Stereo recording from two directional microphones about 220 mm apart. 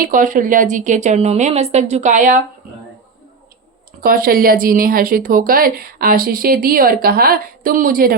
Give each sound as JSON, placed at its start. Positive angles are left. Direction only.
{"t": 0.0, "sound": "speech", "side_deg": -40}
{"t": 4.0, "sound": "speech", "side_deg": -40}